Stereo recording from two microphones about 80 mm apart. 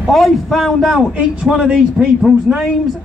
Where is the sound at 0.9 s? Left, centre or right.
Centre.